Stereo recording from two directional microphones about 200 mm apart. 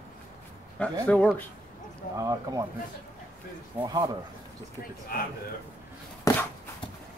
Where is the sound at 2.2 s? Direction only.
15° right (ahead or behind).